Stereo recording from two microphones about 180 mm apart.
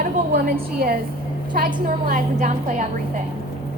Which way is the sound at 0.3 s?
55° right (ahead or behind).